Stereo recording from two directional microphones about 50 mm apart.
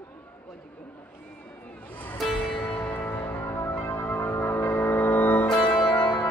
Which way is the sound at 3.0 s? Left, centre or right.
Left.